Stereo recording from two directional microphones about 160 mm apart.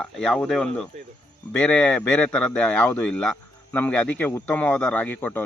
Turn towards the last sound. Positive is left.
turn(degrees=10)  # may be behind; listen again after turning